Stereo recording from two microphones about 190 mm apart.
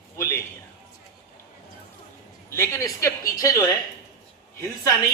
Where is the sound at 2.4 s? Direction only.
15° left (ahead or behind).